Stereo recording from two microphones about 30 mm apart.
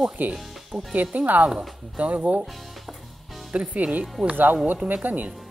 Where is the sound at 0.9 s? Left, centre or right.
Right.